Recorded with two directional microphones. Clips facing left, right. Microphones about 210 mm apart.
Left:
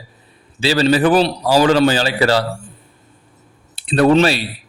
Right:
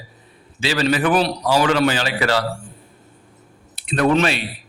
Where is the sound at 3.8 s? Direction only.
30° left (ahead or behind).